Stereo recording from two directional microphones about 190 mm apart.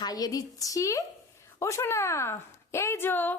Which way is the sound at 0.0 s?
20° left (ahead or behind).